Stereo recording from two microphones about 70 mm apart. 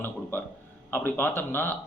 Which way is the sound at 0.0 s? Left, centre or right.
Left.